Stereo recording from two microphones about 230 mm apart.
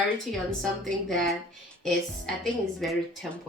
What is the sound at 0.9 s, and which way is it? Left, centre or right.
Speech, centre.